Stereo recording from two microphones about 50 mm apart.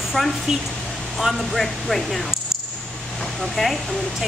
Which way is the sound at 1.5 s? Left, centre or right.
Centre.